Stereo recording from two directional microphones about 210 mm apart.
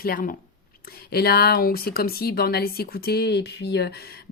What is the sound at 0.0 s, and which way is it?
Speech, 45° left (ahead or behind).